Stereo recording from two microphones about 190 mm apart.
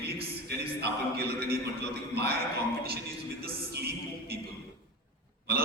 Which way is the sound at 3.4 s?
55° right (ahead or behind).